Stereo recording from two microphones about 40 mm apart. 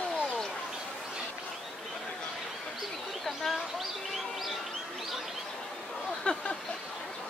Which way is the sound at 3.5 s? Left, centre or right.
Centre.